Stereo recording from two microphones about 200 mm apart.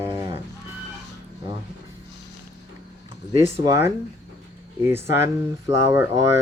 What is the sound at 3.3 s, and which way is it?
Speech, 15° right (ahead or behind).